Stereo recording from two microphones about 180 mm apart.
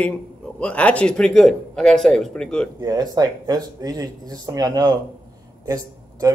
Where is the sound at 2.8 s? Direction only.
20° right (ahead or behind).